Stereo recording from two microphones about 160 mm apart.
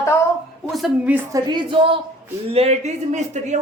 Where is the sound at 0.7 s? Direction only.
5° right (ahead or behind).